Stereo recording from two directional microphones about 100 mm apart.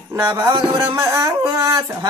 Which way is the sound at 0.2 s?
25° right (ahead or behind).